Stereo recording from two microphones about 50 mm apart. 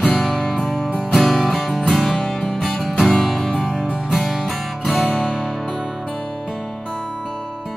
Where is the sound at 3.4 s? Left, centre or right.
Centre.